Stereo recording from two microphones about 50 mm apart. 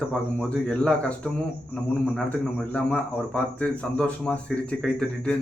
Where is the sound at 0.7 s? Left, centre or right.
Left.